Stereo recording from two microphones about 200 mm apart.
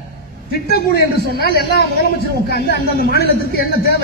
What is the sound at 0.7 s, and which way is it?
Speech, 50° left (ahead or behind).